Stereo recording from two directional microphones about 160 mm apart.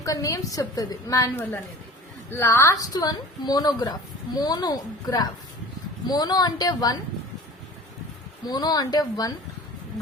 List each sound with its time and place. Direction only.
0.0 s a woman's voice: 20° left (ahead or behind)
8.4 s a woman's voice: 25° left (ahead or behind)